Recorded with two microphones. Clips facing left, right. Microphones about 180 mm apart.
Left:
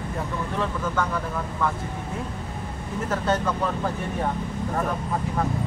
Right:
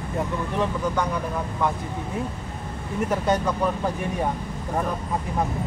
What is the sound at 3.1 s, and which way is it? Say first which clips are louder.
Speech: right 1 dB; 15° right (ahead or behind).